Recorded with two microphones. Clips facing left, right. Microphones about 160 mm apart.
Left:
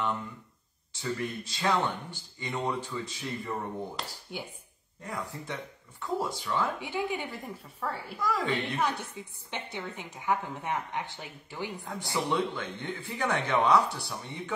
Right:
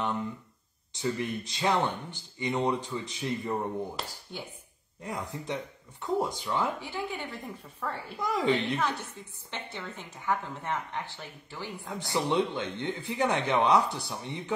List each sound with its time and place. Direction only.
0.9 s speech: 20° right (ahead or behind)
4.3 s a woman's voice: 10° left (ahead or behind)
5.0 s speech: 20° right (ahead or behind)
6.8 s a woman's voice: 15° left (ahead or behind)
8.2 s speech: 20° right (ahead or behind)
8.7 s a woman's voice: 15° left (ahead or behind)
12.1 s speech: 20° right (ahead or behind)